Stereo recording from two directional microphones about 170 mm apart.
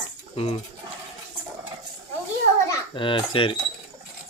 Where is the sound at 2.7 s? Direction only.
30° left (ahead or behind).